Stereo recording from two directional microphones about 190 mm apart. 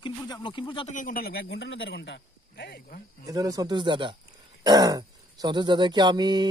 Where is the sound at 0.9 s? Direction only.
45° left (ahead or behind).